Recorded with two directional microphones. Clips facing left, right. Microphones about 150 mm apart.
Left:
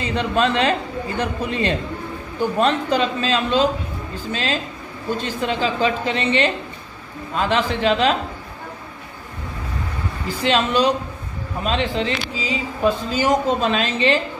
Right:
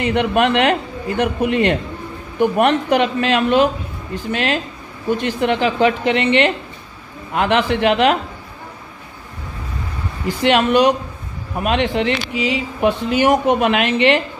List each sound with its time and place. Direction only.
0.0 s speech: 65° right (ahead or behind)
10.4 s speech: 60° right (ahead or behind)